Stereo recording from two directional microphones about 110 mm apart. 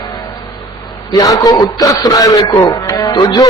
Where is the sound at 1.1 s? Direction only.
30° left (ahead or behind).